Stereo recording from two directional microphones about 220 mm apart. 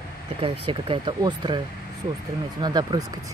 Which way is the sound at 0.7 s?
25° right (ahead or behind).